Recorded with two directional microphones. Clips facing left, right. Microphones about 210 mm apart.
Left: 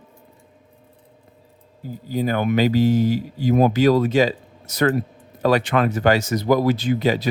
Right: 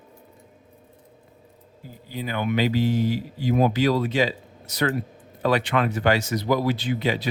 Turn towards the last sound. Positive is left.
turn(degrees=40)  # may be behind; listen again after turning